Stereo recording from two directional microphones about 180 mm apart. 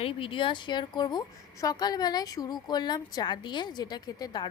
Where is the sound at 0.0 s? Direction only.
30° left (ahead or behind).